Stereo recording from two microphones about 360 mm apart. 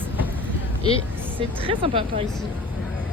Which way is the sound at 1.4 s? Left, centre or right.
Centre.